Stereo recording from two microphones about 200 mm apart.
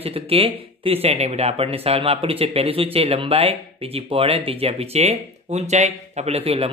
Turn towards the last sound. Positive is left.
turn(degrees=-30)  # may be behind; listen again after turning